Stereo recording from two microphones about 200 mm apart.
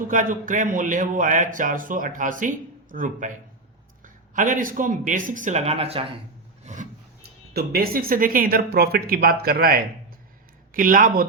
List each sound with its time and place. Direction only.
0.1 s a man's voice: 40° right (ahead or behind)
6.7 s filing: 35° right (ahead or behind)
7.5 s speech: 50° right (ahead or behind)